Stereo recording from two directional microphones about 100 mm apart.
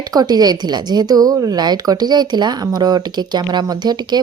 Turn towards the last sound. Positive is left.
turn(degrees=-45)  # may be behind; listen again after turning